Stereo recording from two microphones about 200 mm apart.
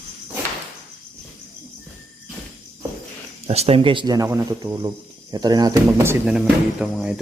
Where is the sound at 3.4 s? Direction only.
30° right (ahead or behind); by 7.1 s 5° right (ahead or behind).